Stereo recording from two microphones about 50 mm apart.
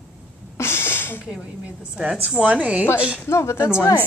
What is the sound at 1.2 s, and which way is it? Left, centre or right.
A woman's voice, right.